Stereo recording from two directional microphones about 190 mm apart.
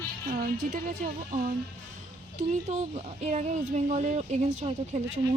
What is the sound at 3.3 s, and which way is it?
A woman's voice, 40° right (ahead or behind).